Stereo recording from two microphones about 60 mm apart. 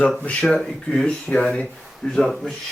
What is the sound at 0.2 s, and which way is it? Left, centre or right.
Speech, left.